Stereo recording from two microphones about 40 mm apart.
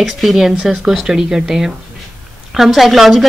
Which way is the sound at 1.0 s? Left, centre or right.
Centre.